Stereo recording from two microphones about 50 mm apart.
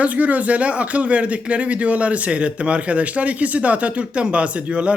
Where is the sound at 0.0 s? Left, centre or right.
Right.